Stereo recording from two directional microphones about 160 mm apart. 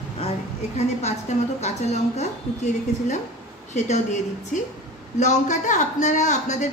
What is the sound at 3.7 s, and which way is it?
A man's voice, 45° left (ahead or behind).